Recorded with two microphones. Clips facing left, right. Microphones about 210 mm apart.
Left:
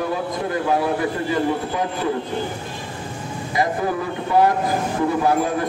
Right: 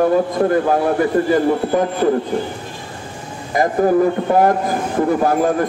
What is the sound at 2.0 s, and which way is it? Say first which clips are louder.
Speech: right 8 dB; 55° right (ahead or behind).